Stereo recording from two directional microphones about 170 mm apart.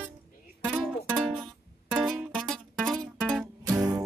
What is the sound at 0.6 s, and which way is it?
Music, centre (ahead or behind).